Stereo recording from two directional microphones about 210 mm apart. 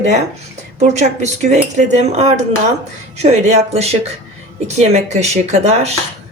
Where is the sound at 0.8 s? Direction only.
35° right (ahead or behind).